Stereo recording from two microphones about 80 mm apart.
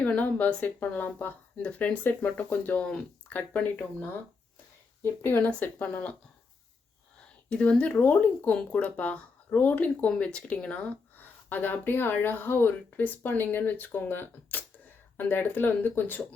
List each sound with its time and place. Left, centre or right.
0.0 s a woman's voice: centre
5.2 s speech: left
7.5 s speech: centre